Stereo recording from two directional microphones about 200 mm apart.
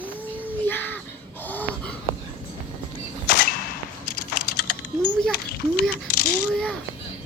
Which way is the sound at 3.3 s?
50° left (ahead or behind).